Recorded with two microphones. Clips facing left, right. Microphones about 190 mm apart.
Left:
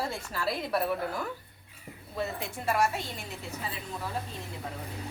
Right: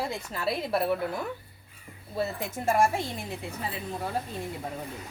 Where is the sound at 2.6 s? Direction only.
45° right (ahead or behind).